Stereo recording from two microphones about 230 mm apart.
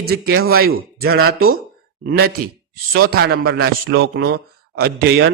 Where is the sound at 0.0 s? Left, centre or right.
Right.